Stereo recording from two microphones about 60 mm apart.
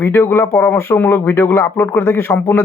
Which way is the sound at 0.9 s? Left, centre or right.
Left.